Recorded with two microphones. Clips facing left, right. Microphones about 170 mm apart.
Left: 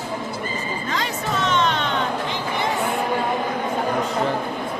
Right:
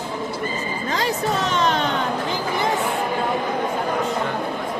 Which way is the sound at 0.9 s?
35° right (ahead or behind).